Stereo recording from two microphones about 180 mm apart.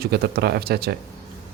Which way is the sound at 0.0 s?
60° right (ahead or behind).